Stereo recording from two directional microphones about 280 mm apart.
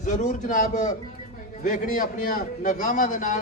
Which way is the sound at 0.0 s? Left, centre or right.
Left.